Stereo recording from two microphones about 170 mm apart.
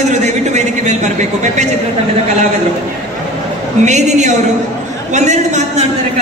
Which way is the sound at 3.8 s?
45° right (ahead or behind).